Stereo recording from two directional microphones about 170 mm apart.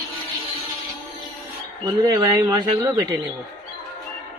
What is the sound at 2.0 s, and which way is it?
Speech, 20° right (ahead or behind).